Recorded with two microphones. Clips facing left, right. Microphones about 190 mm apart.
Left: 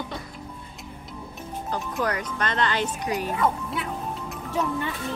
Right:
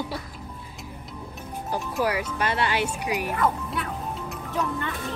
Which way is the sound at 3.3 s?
Centre (ahead or behind).